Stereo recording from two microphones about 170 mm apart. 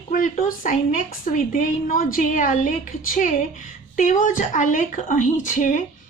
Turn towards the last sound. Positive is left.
turn(degrees=50)  # may be behind; listen again after turning